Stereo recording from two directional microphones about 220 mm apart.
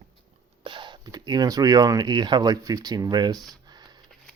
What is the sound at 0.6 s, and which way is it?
Speech, 20° right (ahead or behind).